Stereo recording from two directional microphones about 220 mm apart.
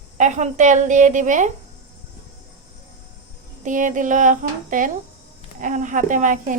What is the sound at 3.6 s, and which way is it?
Speech, 35° right (ahead or behind).